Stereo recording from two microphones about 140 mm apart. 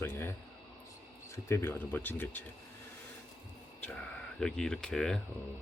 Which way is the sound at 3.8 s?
10° left (ahead or behind).